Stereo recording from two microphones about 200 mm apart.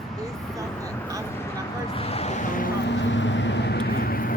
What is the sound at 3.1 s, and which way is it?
Vehicle, 65° left (ahead or behind).